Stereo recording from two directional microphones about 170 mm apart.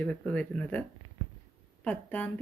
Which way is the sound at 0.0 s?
5° left (ahead or behind).